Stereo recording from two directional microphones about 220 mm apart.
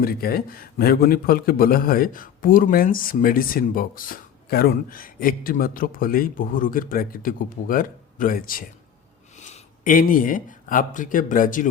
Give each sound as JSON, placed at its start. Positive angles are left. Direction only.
{"t": 0.0, "sound": "a man's voice", "side_deg": 45}